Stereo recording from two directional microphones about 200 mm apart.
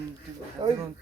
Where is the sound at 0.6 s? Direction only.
25° right (ahead or behind).